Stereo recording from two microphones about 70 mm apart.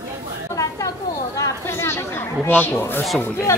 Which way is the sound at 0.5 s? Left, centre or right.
Left.